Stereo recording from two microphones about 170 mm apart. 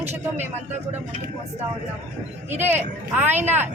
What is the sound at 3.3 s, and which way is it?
Speech, 40° right (ahead or behind).